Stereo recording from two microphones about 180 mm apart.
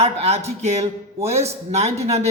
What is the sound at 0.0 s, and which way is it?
Speech, 35° right (ahead or behind).